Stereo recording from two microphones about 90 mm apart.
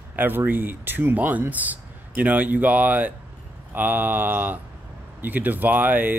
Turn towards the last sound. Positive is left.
turn(degrees=-20)  # may be behind; listen again after turning